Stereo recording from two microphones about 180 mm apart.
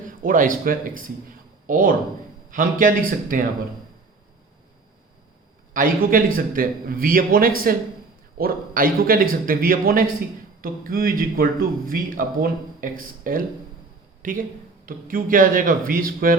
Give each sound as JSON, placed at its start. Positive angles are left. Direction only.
{"t": 0.0, "sound": "speech", "side_deg": -50}
{"t": 5.7, "sound": "speech", "side_deg": -50}